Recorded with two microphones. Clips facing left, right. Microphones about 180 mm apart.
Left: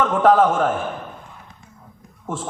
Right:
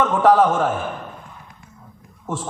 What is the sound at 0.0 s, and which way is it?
Speech, 55° left (ahead or behind).